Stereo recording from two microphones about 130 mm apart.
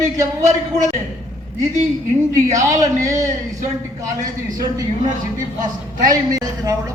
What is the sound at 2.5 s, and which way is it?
Speech, 25° right (ahead or behind).